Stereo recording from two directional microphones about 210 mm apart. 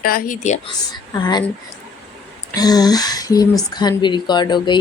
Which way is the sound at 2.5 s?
20° left (ahead or behind).